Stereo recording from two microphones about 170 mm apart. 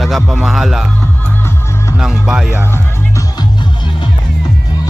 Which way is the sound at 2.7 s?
20° left (ahead or behind).